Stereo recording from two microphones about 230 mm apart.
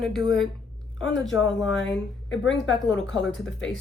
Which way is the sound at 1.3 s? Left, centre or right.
Centre.